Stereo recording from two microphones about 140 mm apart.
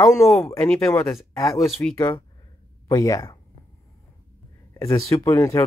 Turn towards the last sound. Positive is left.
turn(degrees=20)  # may be behind; listen again after turning